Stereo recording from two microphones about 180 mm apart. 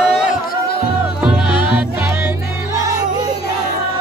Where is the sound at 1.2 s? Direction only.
10° right (ahead or behind).